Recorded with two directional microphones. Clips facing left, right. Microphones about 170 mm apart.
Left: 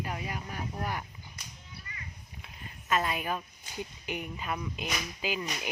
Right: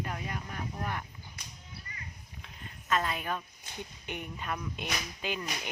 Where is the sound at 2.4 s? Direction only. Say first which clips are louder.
Left 1 dB; 10° left (ahead or behind).